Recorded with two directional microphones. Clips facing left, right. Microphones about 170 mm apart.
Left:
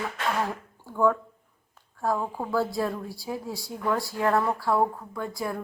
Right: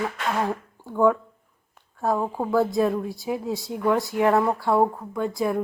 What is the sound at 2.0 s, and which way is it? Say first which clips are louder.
Speech: right 4 dB; 25° right (ahead or behind).